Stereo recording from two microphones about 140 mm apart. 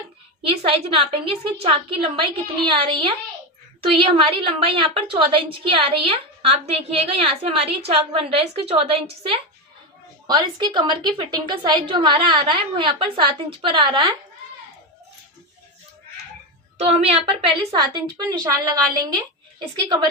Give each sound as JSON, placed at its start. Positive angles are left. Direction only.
{"t": 0.4, "sound": "a woman's voice", "side_deg": -40}
{"t": 10.2, "sound": "a woman's voice", "side_deg": -30}
{"t": 16.7, "sound": "a woman's voice", "side_deg": -50}
{"t": 17.7, "sound": "a woman's voice", "side_deg": -30}